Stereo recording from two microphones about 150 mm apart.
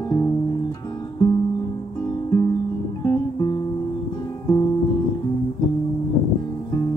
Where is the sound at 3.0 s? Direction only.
20° left (ahead or behind).